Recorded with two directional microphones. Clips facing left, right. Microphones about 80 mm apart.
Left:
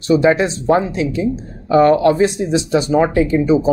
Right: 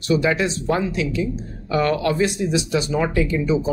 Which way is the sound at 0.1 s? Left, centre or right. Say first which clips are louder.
Left 6 dB; left.